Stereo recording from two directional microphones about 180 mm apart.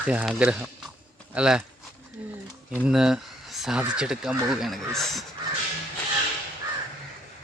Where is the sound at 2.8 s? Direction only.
5° right (ahead or behind).